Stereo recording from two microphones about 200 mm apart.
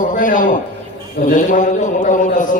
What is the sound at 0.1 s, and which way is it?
A man's voice, 40° left (ahead or behind).